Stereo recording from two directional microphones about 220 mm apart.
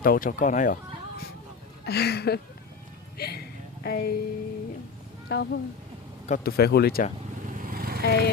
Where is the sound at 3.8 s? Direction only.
45° left (ahead or behind).